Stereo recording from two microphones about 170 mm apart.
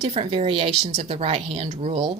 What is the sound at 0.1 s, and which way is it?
Speech, 35° right (ahead or behind).